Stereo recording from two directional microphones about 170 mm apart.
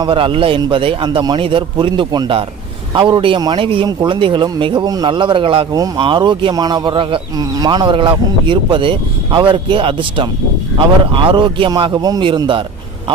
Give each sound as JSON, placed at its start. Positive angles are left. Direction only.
{"t": 0.0, "sound": "a man's voice", "side_deg": -30}